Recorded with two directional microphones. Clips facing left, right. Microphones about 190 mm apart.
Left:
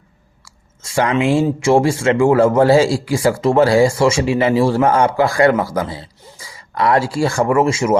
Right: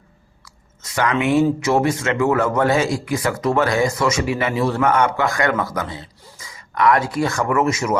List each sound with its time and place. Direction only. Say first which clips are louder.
0.4 s speech: left 1 dB; 30° left (ahead or behind)